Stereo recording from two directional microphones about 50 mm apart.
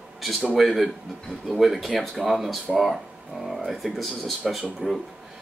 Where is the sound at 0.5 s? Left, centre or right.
Centre.